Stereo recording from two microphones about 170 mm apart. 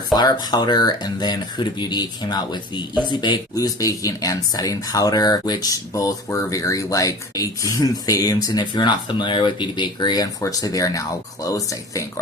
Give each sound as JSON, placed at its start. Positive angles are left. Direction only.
{"t": 0.1, "sound": "speech", "side_deg": 25}